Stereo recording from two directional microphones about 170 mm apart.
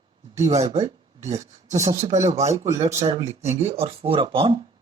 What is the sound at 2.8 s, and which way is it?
Speech, 40° right (ahead or behind).